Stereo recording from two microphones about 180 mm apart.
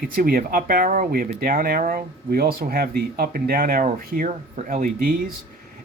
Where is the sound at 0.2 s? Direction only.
50° right (ahead or behind).